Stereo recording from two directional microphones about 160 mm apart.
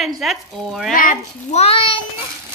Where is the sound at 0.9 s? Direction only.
60° left (ahead or behind).